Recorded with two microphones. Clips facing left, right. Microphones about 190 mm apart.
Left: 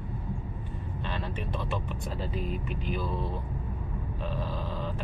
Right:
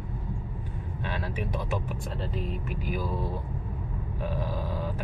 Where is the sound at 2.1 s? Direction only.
Centre (ahead or behind).